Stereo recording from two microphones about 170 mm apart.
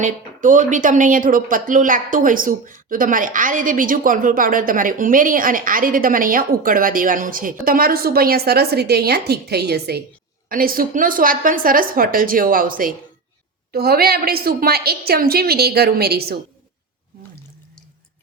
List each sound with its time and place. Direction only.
0.0 s a woman's voice: 50° right (ahead or behind); by 10.0 s 70° right (ahead or behind)
10.5 s a woman's voice: 55° right (ahead or behind)